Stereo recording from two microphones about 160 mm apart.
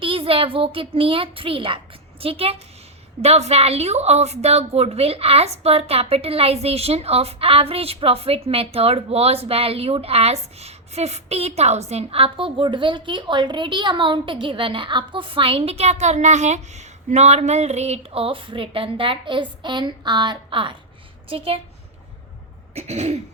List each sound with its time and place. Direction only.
0.0 s a woman's voice: 35° right (ahead or behind)
22.7 s cough: 45° right (ahead or behind)